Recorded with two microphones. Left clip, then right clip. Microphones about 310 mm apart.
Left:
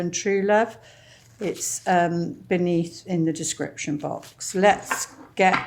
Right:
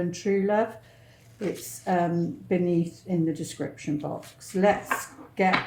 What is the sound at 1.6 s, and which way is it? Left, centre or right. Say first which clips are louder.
Speech: left 6 dB; left.